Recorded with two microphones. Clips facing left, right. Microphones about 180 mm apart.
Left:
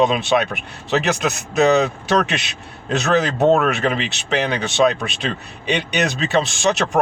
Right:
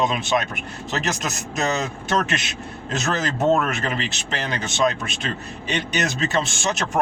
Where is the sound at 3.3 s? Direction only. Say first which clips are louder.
Left 3 dB; 40° left (ahead or behind).